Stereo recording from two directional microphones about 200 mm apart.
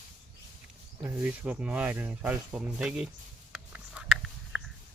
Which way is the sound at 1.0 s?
10° right (ahead or behind).